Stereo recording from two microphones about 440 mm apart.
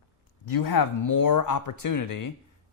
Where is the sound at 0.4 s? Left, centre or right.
Left.